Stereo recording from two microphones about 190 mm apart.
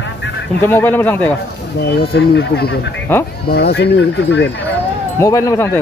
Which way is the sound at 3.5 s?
60° left (ahead or behind).